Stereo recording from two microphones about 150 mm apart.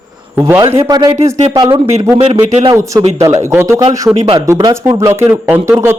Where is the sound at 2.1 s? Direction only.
40° right (ahead or behind).